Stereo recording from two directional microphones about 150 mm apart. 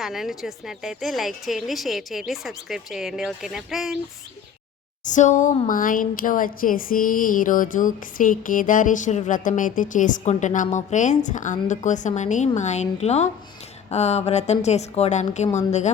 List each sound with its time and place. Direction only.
0.0 s a woman's voice: centre (ahead or behind)
5.0 s a woman's voice: 55° left (ahead or behind)